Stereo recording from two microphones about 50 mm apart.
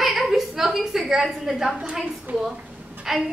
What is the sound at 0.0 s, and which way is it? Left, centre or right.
A woman's voice, centre.